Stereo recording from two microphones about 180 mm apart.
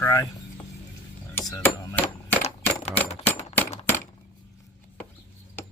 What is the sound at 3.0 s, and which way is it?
Typewriter, 35° left (ahead or behind).